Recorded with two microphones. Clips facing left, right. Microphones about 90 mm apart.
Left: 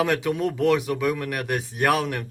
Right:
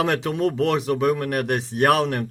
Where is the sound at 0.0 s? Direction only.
30° right (ahead or behind).